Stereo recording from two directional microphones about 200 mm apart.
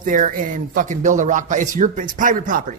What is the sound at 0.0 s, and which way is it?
Speech, 40° right (ahead or behind).